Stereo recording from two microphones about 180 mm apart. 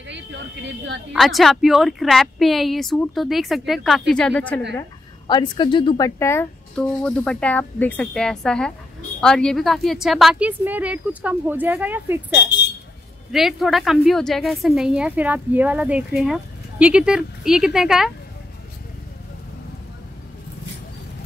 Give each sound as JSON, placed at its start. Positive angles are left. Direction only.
{"t": 1.1, "sound": "speech", "side_deg": 0}
{"t": 5.2, "sound": "a woman's voice", "side_deg": 25}
{"t": 6.7, "sound": "speech", "side_deg": 5}
{"t": 13.3, "sound": "speech", "side_deg": 0}